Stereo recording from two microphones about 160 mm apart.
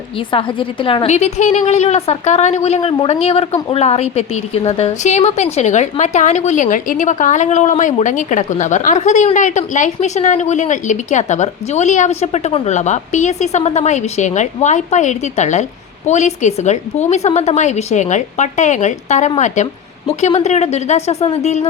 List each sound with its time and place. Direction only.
0.3 s a woman's voice: 30° left (ahead or behind)